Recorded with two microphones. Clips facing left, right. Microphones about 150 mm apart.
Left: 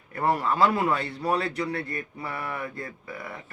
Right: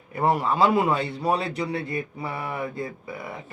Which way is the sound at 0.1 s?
15° right (ahead or behind).